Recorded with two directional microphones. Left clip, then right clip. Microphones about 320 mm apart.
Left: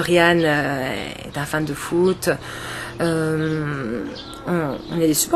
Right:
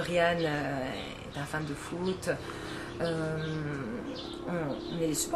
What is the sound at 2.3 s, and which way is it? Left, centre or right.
Speech, left.